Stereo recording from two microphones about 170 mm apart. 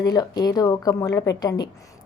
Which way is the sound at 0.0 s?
25° left (ahead or behind).